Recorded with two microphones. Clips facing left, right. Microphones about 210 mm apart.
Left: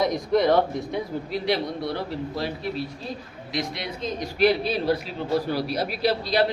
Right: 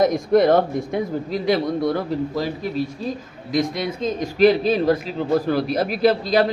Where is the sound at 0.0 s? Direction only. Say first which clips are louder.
Right 5 dB; 50° right (ahead or behind).